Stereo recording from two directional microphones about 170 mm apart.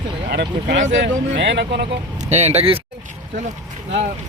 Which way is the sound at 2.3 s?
40° right (ahead or behind).